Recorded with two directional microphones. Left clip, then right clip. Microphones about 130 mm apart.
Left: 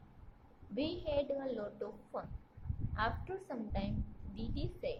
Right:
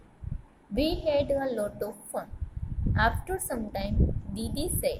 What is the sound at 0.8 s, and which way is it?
A woman's voice, 30° right (ahead or behind).